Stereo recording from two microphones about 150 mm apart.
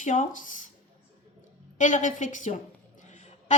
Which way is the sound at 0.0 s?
55° left (ahead or behind).